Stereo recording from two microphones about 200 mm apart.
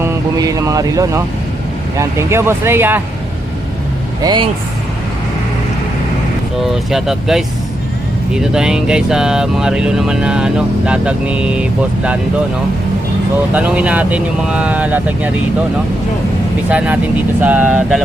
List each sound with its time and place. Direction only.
0.0 s music: 15° right (ahead or behind)
2.0 s speech: 15° right (ahead or behind)
4.2 s speech: 20° right (ahead or behind)
6.9 s speech: centre (ahead or behind)
13.5 s speech: 5° right (ahead or behind)
16.6 s speech: 5° right (ahead or behind)